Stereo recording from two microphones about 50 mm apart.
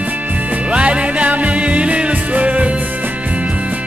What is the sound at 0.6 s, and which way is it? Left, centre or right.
Music, right.